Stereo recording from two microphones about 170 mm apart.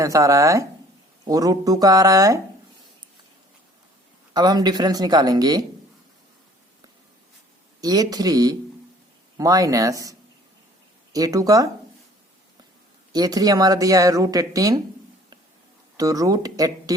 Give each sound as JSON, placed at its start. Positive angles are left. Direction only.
{"t": 0.0, "sound": "speech", "side_deg": -20}
{"t": 4.4, "sound": "speech", "side_deg": -25}
{"t": 7.8, "sound": "speech", "side_deg": -20}
{"t": 13.1, "sound": "speech", "side_deg": -20}
{"t": 16.0, "sound": "speech", "side_deg": -20}